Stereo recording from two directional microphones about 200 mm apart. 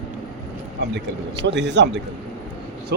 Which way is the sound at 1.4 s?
60° right (ahead or behind).